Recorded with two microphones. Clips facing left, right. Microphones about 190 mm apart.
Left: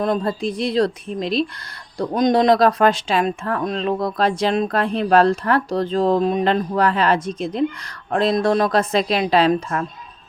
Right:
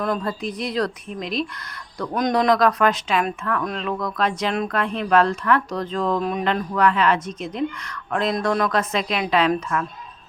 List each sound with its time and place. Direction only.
0.0 s a woman's voice: 30° left (ahead or behind)